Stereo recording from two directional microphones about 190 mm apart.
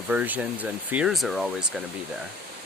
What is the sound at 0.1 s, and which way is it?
Speech, 10° right (ahead or behind).